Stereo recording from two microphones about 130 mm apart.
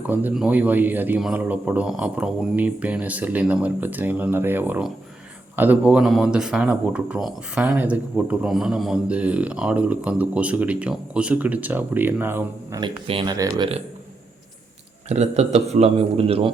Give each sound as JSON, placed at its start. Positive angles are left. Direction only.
{"t": 0.1, "sound": "speech", "side_deg": -15}
{"t": 12.8, "sound": "speech", "side_deg": -40}
{"t": 13.3, "sound": "speech", "side_deg": -25}
{"t": 15.1, "sound": "a man's voice", "side_deg": -55}